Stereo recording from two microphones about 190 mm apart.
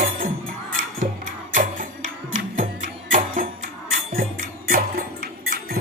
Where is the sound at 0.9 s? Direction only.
45° right (ahead or behind).